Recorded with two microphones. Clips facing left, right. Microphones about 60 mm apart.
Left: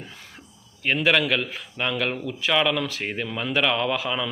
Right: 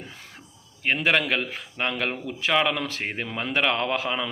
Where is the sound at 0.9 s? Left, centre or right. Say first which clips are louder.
Left 2 dB; right.